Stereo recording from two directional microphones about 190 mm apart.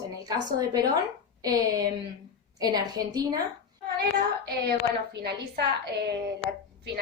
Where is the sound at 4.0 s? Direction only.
55° right (ahead or behind).